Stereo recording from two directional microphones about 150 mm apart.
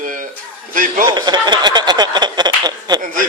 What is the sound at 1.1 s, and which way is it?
Speech, 30° right (ahead or behind).